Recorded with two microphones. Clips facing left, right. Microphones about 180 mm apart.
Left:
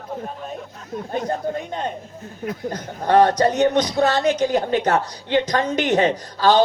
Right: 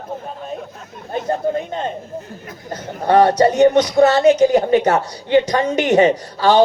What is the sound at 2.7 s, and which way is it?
A woman's voice, 10° right (ahead or behind).